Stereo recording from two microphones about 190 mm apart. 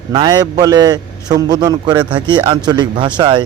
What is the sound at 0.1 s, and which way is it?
A man's voice, 20° right (ahead or behind).